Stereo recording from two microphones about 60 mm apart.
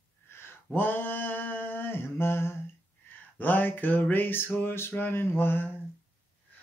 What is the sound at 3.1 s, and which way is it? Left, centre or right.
Speech, left.